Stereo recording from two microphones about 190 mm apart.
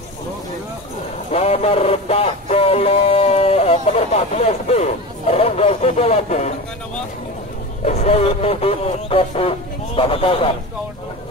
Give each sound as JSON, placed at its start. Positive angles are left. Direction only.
{"t": 1.3, "sound": "music", "side_deg": 30}
{"t": 7.8, "sound": "speech", "side_deg": 35}